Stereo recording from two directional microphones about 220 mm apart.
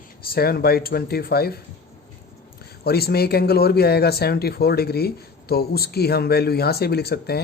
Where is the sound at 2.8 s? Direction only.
45° left (ahead or behind).